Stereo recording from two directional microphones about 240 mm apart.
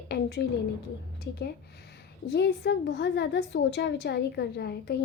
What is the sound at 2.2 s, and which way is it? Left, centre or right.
A woman's voice, left.